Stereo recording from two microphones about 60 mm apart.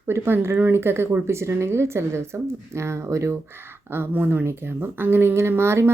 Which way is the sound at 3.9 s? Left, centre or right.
Right.